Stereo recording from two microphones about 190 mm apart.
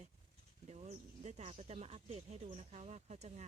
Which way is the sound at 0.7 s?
35° right (ahead or behind).